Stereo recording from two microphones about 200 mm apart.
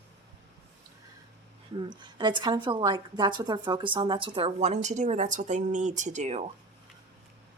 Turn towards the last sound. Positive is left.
turn(degrees=-35)  # may be behind; listen again after turning